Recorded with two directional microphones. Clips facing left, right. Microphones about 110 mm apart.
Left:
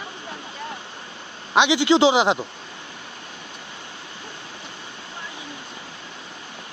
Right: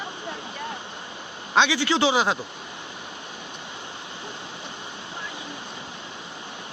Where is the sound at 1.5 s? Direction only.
20° left (ahead or behind).